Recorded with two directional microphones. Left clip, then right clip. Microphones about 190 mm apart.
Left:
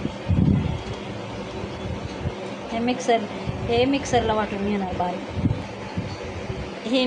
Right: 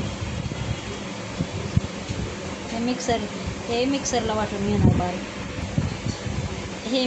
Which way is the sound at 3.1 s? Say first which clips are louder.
Left 4 dB; 15° left (ahead or behind).